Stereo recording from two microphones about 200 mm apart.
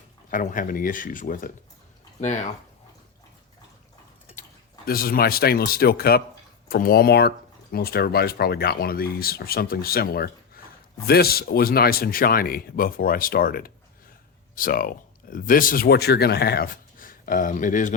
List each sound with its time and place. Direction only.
0.3 s speech: 40° left (ahead or behind)
4.9 s speech: 50° left (ahead or behind)